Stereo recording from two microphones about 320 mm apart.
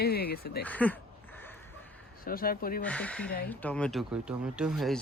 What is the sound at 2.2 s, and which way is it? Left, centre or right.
Speech, left.